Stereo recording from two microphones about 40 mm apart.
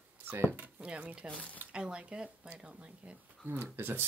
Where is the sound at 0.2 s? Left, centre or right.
Right.